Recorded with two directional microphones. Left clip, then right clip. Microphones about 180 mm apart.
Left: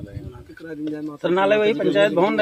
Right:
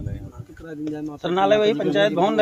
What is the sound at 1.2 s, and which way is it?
Speech, 45° left (ahead or behind).